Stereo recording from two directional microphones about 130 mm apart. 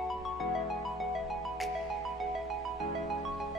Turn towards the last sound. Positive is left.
turn(degrees=0)  # may be behind; listen again after turning